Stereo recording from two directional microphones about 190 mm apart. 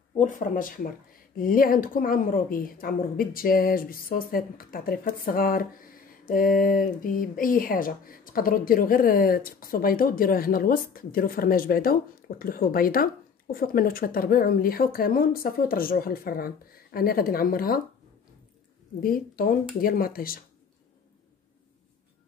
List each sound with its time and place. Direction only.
0.2 s speech: 45° left (ahead or behind)
19.0 s speech: 50° left (ahead or behind)